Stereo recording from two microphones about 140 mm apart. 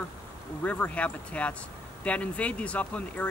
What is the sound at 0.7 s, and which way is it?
Speech, 10° left (ahead or behind).